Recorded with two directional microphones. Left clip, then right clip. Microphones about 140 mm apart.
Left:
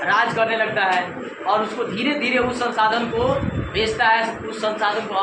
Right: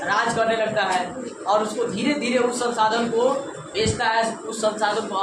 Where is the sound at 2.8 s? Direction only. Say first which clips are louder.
Left 2 dB; 20° left (ahead or behind).